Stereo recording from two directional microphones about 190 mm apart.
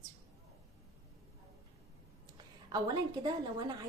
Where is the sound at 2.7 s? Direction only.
20° right (ahead or behind).